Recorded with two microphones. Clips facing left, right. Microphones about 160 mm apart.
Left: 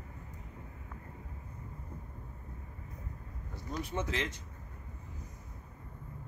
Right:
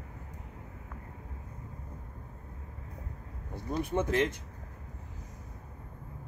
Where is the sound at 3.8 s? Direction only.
55° right (ahead or behind).